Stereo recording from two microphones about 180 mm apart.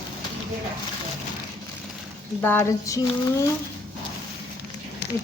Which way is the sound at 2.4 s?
10° left (ahead or behind).